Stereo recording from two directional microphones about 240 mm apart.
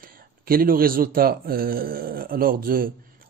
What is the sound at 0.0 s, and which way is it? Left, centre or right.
A man's voice, right.